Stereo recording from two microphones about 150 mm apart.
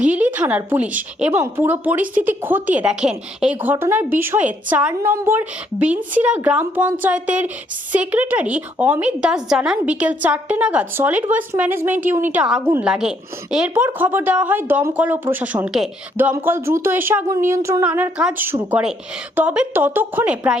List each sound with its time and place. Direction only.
0.0 s a woman's voice: 10° right (ahead or behind)
12.9 s a woman's voice: 5° right (ahead or behind)
16.3 s a woman's voice: 15° right (ahead or behind)